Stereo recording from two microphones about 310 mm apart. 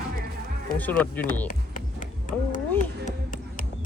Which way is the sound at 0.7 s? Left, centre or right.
Centre.